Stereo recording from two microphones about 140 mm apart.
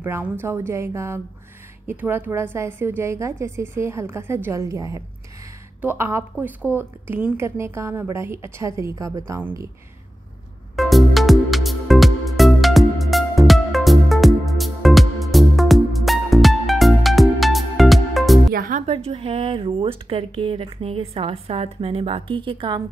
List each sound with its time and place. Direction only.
0.0 s a woman's voice: 15° right (ahead or behind)
10.8 s music: centre (ahead or behind)
18.5 s a woman's voice: 80° right
18.9 s speech: 45° right (ahead or behind)